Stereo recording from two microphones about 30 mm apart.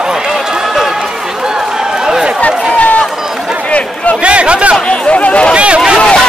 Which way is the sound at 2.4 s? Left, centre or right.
Left.